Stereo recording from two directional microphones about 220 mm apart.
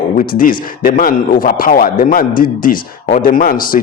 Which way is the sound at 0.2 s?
40° left (ahead or behind).